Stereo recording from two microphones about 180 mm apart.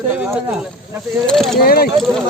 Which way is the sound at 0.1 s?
10° right (ahead or behind).